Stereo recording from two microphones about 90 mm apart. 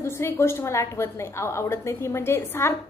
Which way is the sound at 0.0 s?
30° left (ahead or behind).